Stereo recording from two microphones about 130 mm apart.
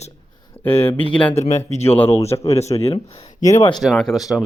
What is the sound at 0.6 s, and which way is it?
Speech, 15° left (ahead or behind).